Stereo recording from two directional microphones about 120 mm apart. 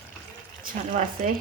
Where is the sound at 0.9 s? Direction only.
90° right.